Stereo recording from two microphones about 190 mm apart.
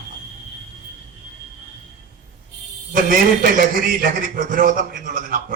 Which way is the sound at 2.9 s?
45° right (ahead or behind).